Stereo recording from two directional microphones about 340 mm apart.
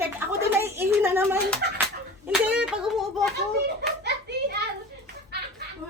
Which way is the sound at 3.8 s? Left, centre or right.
Right.